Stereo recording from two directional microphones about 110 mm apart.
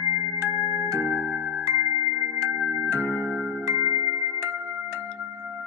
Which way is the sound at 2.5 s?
10° right (ahead or behind).